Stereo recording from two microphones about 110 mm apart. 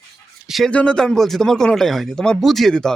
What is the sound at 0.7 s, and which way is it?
Speech, 10° left (ahead or behind).